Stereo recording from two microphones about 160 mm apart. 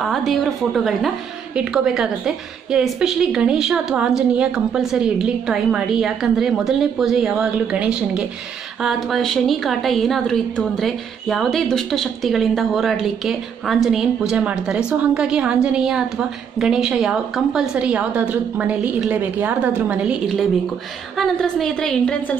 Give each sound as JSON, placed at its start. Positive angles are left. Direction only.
{"t": 0.0, "sound": "a woman's voice", "side_deg": 0}